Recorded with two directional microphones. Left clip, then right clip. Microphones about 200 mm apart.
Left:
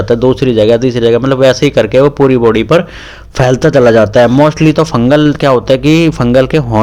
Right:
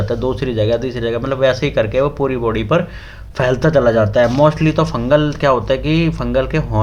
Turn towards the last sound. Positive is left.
turn(degrees=45)  # may be behind; listen again after turning